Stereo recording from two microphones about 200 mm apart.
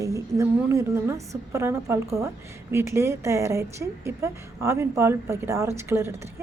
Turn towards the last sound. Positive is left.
turn(degrees=-10)  # may be behind; listen again after turning